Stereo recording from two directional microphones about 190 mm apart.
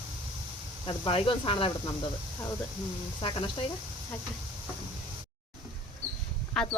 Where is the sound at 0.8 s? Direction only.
25° left (ahead or behind).